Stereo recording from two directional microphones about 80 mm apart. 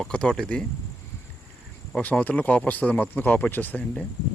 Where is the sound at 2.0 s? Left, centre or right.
Centre.